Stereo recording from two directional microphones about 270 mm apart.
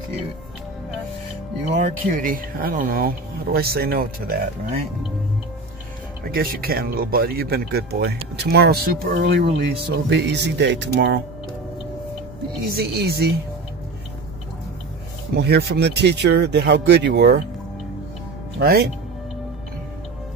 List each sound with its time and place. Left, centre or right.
1.8 s speech: right
6.3 s speech: right
12.6 s speech: right
15.3 s speech: right
18.6 s speech: right